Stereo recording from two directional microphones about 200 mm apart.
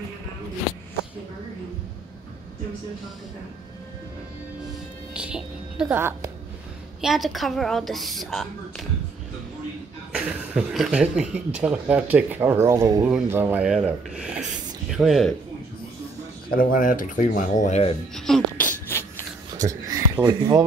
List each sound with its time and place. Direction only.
5.1 s music: 5° right (ahead or behind)
7.0 s speech: centre (ahead or behind)
10.1 s speech: 5° right (ahead or behind)
16.4 s speech: 45° left (ahead or behind)
18.1 s a sound: centre (ahead or behind)
19.5 s a sound: 15° right (ahead or behind)